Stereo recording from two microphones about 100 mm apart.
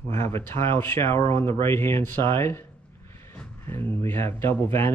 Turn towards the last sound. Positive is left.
turn(degrees=25)  # may be behind; listen again after turning